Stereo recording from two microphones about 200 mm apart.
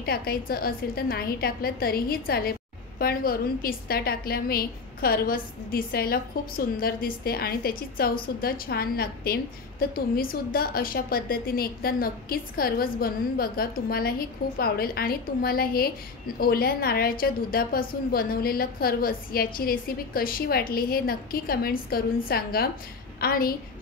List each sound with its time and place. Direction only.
0.0 s a woman's voice: 50° left (ahead or behind)